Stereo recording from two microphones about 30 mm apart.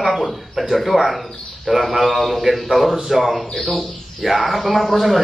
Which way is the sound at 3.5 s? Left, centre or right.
Centre.